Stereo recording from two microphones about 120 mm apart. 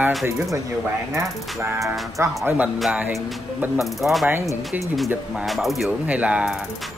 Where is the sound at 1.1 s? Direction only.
20° right (ahead or behind).